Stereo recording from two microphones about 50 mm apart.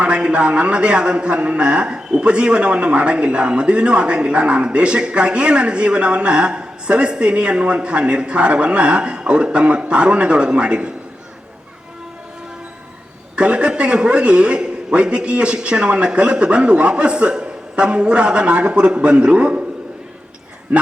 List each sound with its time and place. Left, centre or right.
0.0 s a man's voice: centre
13.3 s a man's voice: right